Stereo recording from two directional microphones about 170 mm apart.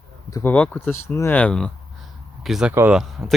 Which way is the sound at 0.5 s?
10° left (ahead or behind).